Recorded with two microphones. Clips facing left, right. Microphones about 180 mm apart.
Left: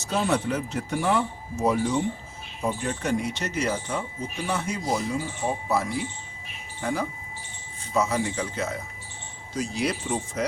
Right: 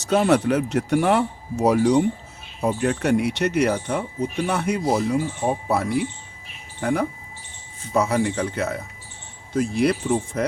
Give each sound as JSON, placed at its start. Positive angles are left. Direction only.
{"t": 0.0, "sound": "speech", "side_deg": -70}